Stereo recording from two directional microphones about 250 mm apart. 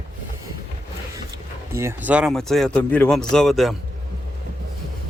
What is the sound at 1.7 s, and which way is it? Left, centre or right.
Speech, centre.